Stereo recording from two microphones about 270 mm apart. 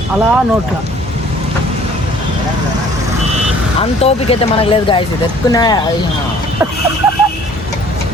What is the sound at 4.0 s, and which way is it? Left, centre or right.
Speech, left.